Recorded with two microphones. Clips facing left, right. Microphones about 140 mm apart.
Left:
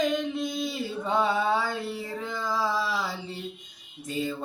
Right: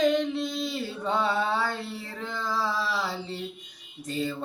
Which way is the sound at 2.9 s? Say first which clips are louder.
Even; 10° left (ahead or behind).